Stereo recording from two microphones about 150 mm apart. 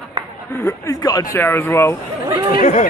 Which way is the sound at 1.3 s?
15° left (ahead or behind).